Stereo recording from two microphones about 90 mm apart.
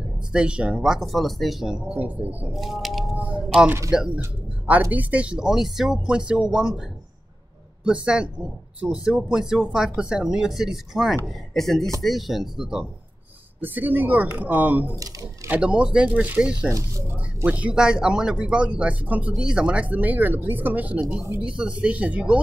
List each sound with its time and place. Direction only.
0.3 s speech: 10° right (ahead or behind)
2.5 s speech: centre (ahead or behind)
3.2 s speech: 15° right (ahead or behind)
7.8 s speech: 10° right (ahead or behind)
13.6 s speech: 20° right (ahead or behind)